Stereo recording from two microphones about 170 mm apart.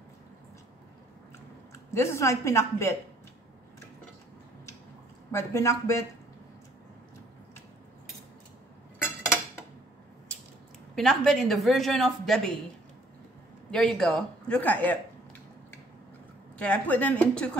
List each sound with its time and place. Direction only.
2.0 s a woman's voice: 15° left (ahead or behind)
5.3 s a woman's voice: 15° left (ahead or behind)
11.0 s speech: centre (ahead or behind)
13.7 s speech: 5° left (ahead or behind)
16.5 s a woman's voice: 10° left (ahead or behind)